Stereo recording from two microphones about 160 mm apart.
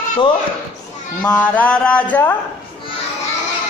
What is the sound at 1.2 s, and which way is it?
A man's voice, 10° left (ahead or behind).